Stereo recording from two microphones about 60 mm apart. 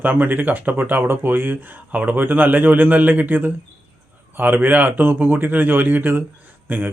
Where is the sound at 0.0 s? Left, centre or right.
Right.